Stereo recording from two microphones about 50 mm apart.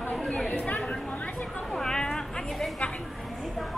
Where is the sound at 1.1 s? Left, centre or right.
Left.